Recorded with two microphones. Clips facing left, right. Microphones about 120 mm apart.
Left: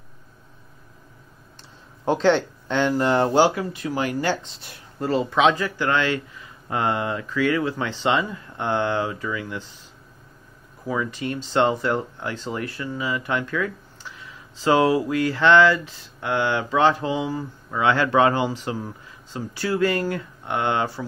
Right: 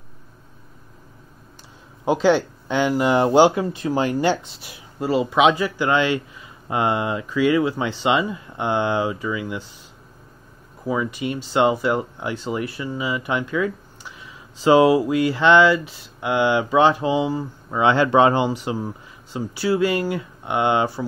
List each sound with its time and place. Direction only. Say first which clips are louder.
2.0 s speech: right 2 dB; 5° right (ahead or behind); by 4.4 s 20° right (ahead or behind)
4.6 s speech: right 2 dB; 5° right (ahead or behind)
10.9 s speech: right 2 dB; 15° right (ahead or behind)